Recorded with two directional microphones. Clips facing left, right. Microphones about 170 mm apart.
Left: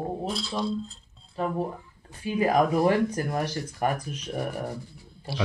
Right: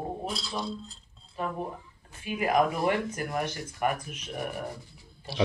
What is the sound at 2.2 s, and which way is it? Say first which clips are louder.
Speech: left 3 dB; 35° left (ahead or behind).